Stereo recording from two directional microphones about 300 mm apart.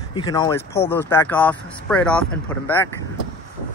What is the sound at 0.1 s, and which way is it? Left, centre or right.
Speech, centre.